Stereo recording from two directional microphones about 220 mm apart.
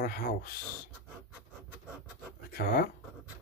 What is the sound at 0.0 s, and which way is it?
Speech, 45° left (ahead or behind).